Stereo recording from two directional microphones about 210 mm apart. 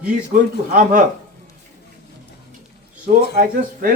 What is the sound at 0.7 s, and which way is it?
Speech, 40° right (ahead or behind).